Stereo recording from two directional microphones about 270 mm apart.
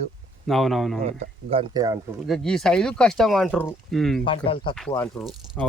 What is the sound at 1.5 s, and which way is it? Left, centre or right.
Speech, centre.